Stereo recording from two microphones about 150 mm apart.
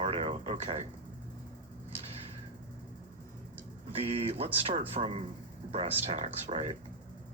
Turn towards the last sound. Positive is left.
turn(degrees=-40)  # may be behind; listen again after turning